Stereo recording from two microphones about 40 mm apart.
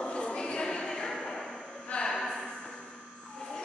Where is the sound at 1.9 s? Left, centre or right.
Left.